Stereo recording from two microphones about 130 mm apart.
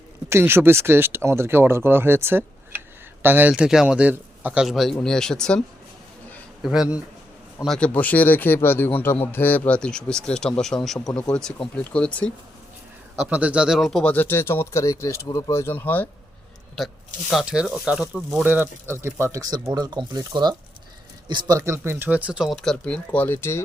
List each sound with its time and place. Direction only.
0.3 s speech: 20° right (ahead or behind)
4.6 s speech: centre (ahead or behind)
13.1 s speech: 10° right (ahead or behind); by 16.0 s 15° left (ahead or behind)
16.8 s speech: 5° left (ahead or behind); by 23.6 s 20° left (ahead or behind)